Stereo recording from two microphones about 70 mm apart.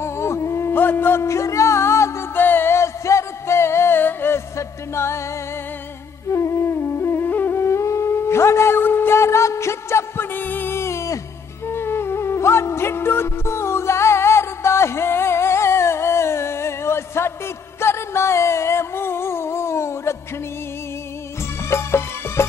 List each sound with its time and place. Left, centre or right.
0.0 s a sound: left
2.3 s music: left
4.6 s music: left
6.3 s music: left
21.6 s music: left